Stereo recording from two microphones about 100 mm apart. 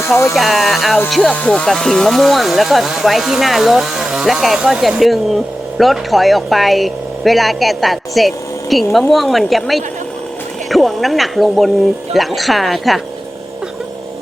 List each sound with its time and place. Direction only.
0.0 s speech: 30° left (ahead or behind)
0.3 s speech: centre (ahead or behind)